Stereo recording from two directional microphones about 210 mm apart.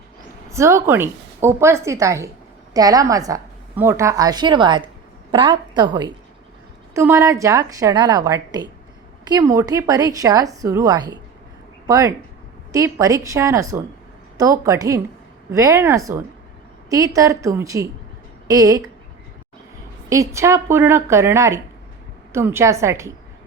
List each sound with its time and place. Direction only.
0.5 s a woman's voice: 15° right (ahead or behind)
20.1 s a woman's voice: 15° right (ahead or behind)